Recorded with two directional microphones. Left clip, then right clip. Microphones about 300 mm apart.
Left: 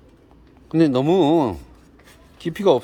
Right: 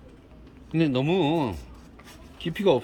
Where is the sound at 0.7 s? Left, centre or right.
Centre.